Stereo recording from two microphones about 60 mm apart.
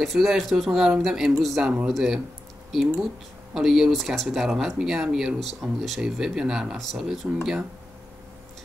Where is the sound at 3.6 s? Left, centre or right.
Centre.